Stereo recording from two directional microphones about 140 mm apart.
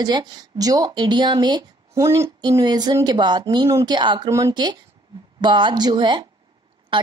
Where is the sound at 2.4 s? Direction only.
25° right (ahead or behind).